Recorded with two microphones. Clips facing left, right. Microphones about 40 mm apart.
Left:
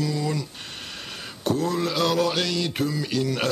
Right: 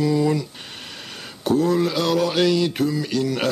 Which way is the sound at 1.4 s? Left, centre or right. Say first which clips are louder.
Right 5 dB; centre.